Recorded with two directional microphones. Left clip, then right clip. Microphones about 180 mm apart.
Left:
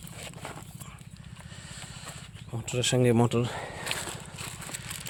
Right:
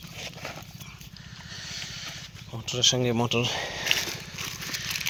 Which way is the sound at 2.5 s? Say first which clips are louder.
Right 5 dB; 40° left (ahead or behind).